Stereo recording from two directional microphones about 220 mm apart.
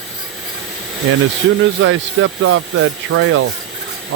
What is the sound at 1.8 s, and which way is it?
Speech, 65° right (ahead or behind).